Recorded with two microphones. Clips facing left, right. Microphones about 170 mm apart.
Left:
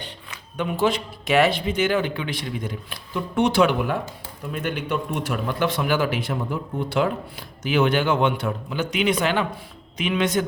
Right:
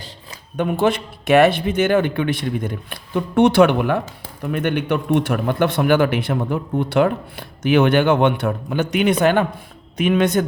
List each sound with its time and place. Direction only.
0.5 s speech: 50° right (ahead or behind)